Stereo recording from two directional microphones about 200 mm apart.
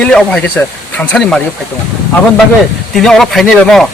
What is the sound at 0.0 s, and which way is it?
Speech, 5° left (ahead or behind).